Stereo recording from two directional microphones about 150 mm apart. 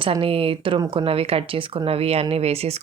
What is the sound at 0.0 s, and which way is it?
Speech, 35° right (ahead or behind).